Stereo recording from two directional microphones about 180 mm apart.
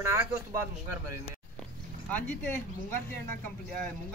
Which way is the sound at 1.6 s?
10° left (ahead or behind).